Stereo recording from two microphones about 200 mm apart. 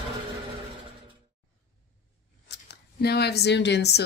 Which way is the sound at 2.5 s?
55° left (ahead or behind).